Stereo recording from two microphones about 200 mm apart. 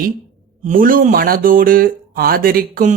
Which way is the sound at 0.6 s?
40° right (ahead or behind).